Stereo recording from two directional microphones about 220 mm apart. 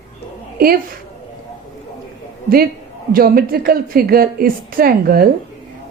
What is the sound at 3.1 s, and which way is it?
A woman's voice, 40° right (ahead or behind).